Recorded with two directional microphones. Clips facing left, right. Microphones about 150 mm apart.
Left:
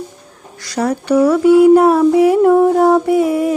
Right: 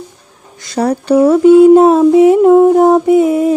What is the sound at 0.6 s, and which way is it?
Speech, 30° right (ahead or behind).